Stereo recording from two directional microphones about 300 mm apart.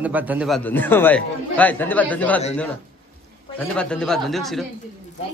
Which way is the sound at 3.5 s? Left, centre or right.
Centre.